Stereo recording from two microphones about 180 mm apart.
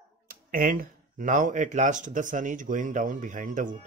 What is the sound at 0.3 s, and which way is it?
Speech, 50° right (ahead or behind).